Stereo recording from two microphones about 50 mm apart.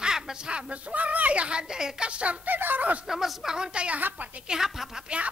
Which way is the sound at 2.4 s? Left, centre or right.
Right.